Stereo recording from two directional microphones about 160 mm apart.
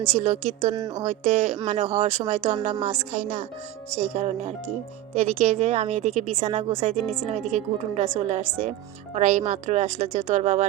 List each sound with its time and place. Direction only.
0.1 s a woman's voice: 45° right (ahead or behind)